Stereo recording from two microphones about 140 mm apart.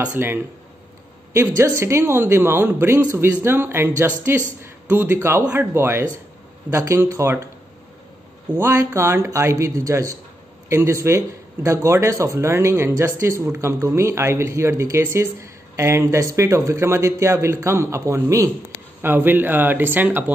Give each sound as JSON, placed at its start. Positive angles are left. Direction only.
{"t": 0.1, "sound": "a woman's voice", "side_deg": -15}
{"t": 1.6, "sound": "a woman's voice", "side_deg": -20}
{"t": 8.5, "sound": "a woman's voice", "side_deg": -20}